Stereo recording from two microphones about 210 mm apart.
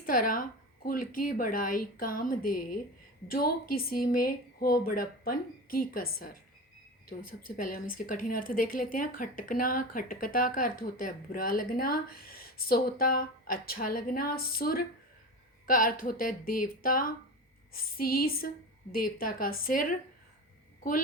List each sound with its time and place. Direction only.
0.0 s a woman's voice: 40° left (ahead or behind)